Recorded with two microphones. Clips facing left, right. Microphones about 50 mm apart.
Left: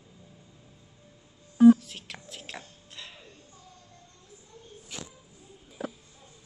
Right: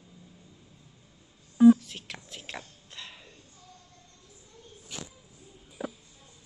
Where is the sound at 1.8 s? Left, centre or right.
Centre.